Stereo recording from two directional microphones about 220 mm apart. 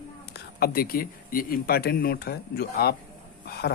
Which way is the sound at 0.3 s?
45° left (ahead or behind).